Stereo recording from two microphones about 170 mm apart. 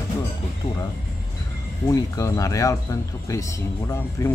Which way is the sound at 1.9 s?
20° left (ahead or behind).